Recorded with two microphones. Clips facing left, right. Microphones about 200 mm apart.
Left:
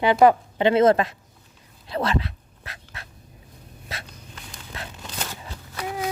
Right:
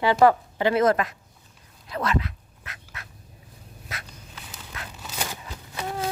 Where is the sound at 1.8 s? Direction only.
30° left (ahead or behind).